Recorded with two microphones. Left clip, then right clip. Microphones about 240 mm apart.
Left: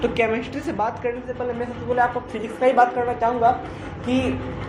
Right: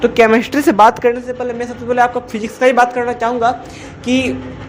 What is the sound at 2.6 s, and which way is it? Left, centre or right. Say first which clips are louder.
Speech: right 6 dB; right.